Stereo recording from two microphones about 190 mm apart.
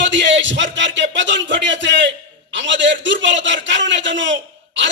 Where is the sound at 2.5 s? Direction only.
70° right (ahead or behind).